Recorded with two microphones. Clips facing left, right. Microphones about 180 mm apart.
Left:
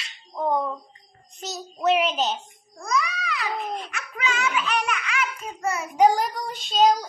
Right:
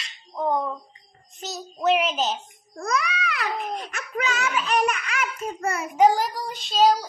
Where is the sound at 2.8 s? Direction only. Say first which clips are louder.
Right 1 dB; 60° right (ahead or behind).